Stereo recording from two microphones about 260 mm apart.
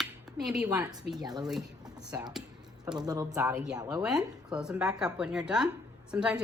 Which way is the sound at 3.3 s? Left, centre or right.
Centre.